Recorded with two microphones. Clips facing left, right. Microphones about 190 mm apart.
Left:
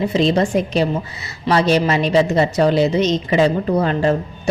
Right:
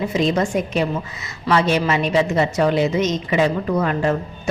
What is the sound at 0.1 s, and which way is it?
A woman's voice, 30° left (ahead or behind).